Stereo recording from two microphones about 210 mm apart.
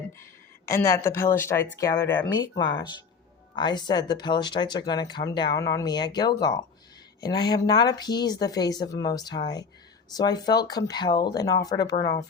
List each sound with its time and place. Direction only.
0.2 s speech: 15° left (ahead or behind)